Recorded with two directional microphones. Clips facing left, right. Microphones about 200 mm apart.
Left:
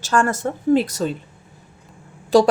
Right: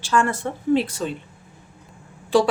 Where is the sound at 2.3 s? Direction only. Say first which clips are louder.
Left 4 dB; 40° left (ahead or behind).